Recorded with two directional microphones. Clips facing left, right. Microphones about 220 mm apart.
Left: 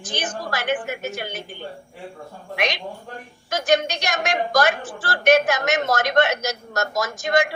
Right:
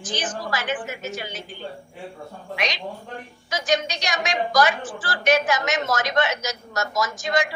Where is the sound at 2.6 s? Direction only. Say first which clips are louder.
Left 3 dB; 55° left (ahead or behind).